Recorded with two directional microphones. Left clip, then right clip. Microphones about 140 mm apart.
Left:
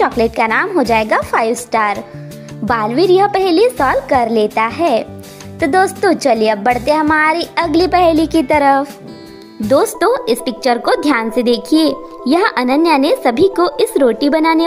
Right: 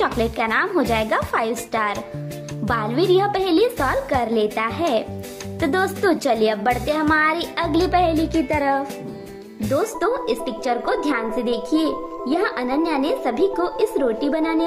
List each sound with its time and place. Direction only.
0.0 s a woman's voice: 45° left (ahead or behind); by 14.6 s 65° left (ahead or behind)